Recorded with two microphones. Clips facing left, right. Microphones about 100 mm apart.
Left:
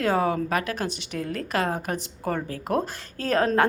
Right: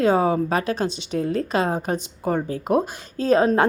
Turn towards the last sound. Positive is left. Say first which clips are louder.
# right 4 dB
turn(degrees=-20)  # may be behind; listen again after turning